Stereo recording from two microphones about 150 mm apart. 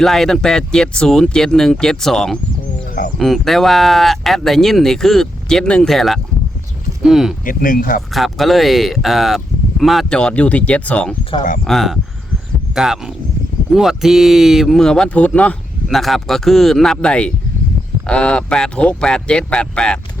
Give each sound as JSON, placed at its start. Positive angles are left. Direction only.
{"t": 0.0, "sound": "speech", "side_deg": 0}
{"t": 7.4, "sound": "speech", "side_deg": 65}
{"t": 8.1, "sound": "speech", "side_deg": 0}